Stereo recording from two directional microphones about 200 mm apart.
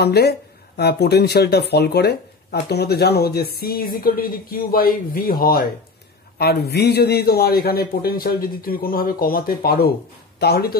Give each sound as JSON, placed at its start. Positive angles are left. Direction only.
{"t": 0.0, "sound": "a man's voice", "side_deg": 55}